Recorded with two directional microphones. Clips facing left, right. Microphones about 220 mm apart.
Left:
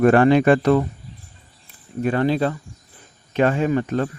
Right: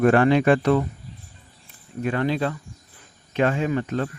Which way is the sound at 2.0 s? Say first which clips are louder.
Left 4 dB; 35° left (ahead or behind).